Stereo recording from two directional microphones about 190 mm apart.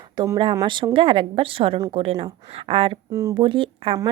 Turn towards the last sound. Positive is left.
turn(degrees=-25)  # may be behind; listen again after turning